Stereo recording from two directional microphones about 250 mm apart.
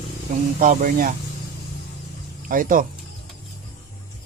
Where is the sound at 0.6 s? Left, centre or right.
Right.